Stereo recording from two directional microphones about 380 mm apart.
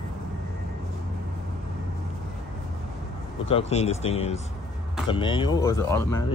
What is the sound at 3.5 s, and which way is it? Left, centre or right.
Speech, centre.